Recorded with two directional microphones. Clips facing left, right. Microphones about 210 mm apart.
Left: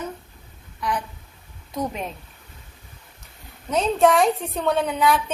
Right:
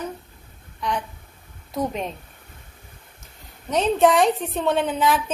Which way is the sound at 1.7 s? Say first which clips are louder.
Right 2 dB; centre (ahead or behind).